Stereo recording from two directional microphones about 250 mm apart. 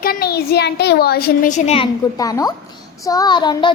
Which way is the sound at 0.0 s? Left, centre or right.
Left.